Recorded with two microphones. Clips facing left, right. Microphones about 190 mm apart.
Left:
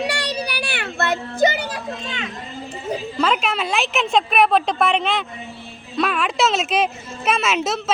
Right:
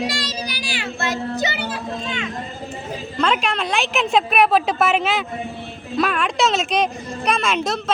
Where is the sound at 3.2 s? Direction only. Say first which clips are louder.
Right 1 dB; centre (ahead or behind).